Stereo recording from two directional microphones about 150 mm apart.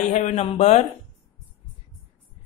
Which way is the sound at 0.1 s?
50° left (ahead or behind).